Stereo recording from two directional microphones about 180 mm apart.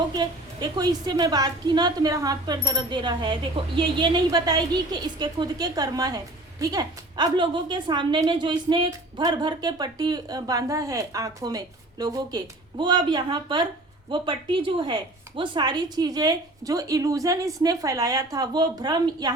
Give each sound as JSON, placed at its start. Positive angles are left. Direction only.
{"t": 0.1, "sound": "a woman's voice", "side_deg": -20}